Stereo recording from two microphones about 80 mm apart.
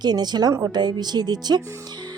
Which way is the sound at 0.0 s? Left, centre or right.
Right.